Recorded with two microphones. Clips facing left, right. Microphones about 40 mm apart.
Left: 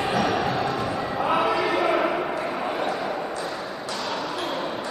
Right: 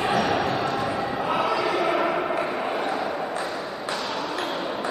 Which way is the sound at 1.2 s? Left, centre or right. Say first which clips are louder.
Left 2 dB; centre.